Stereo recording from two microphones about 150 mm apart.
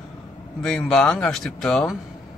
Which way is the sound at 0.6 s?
5° left (ahead or behind).